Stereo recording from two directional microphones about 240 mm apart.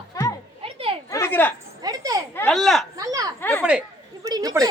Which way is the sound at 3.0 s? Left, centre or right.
Centre.